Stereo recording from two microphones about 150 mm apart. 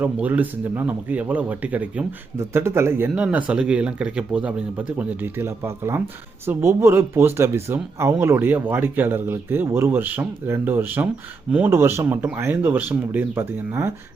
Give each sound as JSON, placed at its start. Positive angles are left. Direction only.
{"t": 0.0, "sound": "speech", "side_deg": -10}